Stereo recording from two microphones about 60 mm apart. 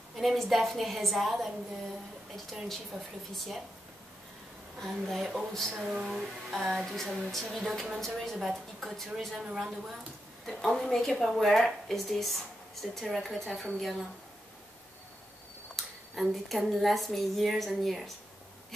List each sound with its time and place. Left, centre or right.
0.1 s speech: centre
2.5 s speech: centre
4.7 s speech: centre
9.4 s a woman's voice: centre
10.4 s a woman's voice: centre
11.2 s speech: centre
15.7 s speech: centre